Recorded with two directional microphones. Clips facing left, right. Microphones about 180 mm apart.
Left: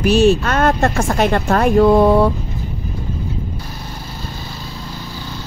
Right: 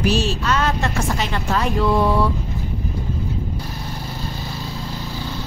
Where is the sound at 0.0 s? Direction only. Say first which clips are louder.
Left 8 dB; 55° left (ahead or behind).